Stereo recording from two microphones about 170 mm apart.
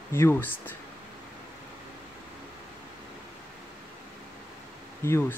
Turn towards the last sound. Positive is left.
turn(degrees=15)  # may be behind; listen again after turning